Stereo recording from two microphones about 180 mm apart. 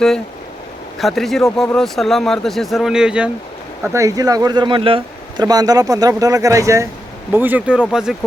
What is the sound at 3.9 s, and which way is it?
Speech, 20° right (ahead or behind).